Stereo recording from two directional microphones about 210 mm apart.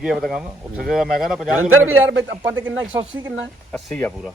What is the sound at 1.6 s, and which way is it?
Speech, 80° right.